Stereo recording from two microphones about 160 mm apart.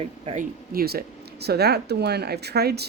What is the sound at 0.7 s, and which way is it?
Speech, 70° right (ahead or behind).